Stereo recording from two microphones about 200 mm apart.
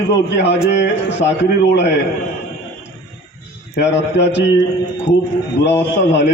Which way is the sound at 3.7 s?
60° left (ahead or behind).